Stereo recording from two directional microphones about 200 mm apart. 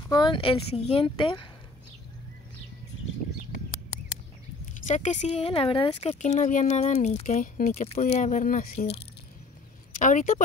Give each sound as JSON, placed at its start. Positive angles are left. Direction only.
{"t": 0.1, "sound": "speech", "side_deg": 20}
{"t": 4.7, "sound": "speech", "side_deg": 35}